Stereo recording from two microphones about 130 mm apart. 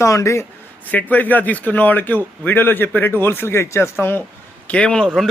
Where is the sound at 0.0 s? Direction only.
25° left (ahead or behind).